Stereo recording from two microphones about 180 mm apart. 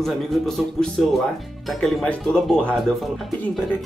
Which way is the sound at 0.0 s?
Centre (ahead or behind).